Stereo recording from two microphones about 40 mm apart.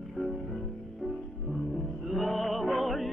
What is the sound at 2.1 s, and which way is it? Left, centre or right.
Music, centre.